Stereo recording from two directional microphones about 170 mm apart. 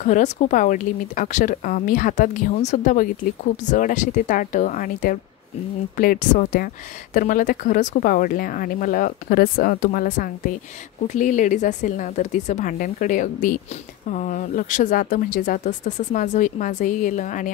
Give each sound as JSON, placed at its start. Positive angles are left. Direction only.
{"t": 0.0, "sound": "speech", "side_deg": 45}